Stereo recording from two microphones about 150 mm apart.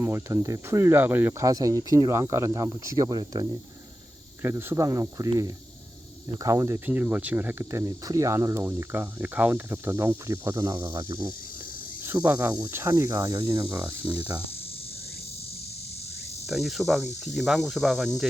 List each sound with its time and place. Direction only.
0.0 s speech: 15° right (ahead or behind)
10.9 s speech: 30° right (ahead or behind)
12.0 s speech: 15° right (ahead or behind)
14.0 s speech: 30° right (ahead or behind)
16.5 s speech: centre (ahead or behind)